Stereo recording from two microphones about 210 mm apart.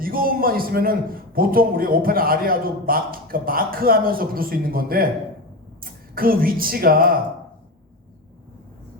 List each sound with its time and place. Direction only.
0.0 s a man's voice: 45° right (ahead or behind)